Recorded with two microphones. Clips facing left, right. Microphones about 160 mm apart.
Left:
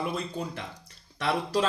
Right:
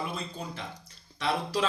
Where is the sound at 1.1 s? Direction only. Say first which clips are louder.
Left 2 dB; 45° left (ahead or behind).